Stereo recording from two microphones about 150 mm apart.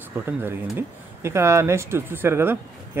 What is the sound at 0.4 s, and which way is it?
Speech, 15° right (ahead or behind).